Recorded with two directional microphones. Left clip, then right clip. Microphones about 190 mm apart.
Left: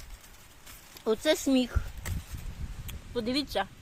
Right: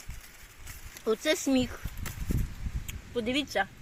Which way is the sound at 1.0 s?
5° left (ahead or behind).